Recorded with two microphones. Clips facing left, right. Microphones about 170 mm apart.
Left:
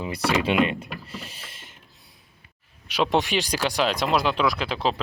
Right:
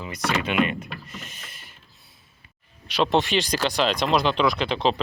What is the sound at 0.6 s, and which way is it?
Speech, 30° left (ahead or behind).